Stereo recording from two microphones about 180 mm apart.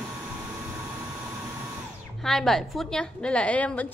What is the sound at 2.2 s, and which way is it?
A woman's voice, centre (ahead or behind).